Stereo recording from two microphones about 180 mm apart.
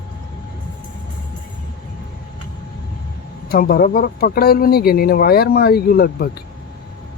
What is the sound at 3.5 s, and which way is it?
Speech, 55° left (ahead or behind).